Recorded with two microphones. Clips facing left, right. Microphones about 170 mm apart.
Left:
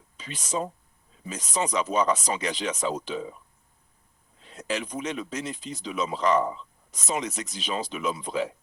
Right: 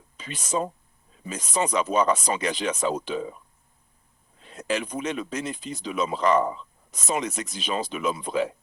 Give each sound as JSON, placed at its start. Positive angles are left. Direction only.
{"t": 0.2, "sound": "speech", "side_deg": -55}
{"t": 4.4, "sound": "speech", "side_deg": -55}